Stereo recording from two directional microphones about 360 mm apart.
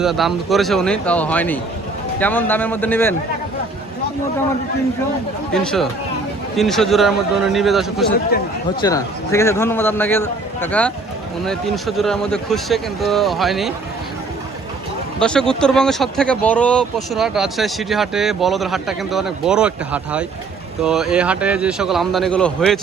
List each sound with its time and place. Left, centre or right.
0.0 s speech: centre
5.5 s speech: centre
8.3 s speech: left
8.8 s a man's voice: centre
15.2 s speech: centre